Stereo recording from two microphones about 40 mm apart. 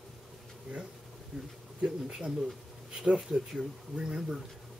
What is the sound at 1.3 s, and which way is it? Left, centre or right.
Speech, centre.